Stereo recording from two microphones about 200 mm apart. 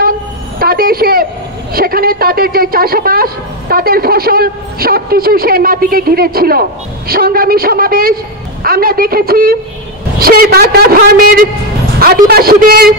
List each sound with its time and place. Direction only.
0.6 s a woman's voice: 50° right (ahead or behind)